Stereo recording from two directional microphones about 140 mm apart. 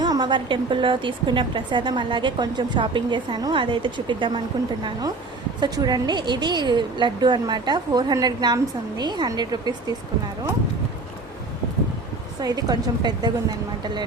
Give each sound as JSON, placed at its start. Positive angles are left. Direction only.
{"t": 0.0, "sound": "a woman's voice", "side_deg": -30}
{"t": 12.4, "sound": "a woman's voice", "side_deg": -30}